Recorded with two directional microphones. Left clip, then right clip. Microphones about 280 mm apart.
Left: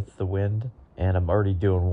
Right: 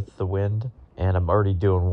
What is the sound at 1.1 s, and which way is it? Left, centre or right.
Speech, right.